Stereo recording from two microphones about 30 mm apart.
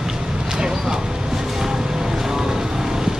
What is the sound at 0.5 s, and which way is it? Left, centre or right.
Vehicle, right.